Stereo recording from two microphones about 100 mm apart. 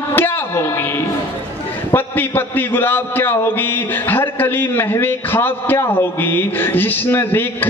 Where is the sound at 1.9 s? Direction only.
20° left (ahead or behind).